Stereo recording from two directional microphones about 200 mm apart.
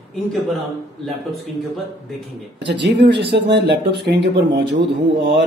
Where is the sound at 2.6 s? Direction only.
60° right (ahead or behind).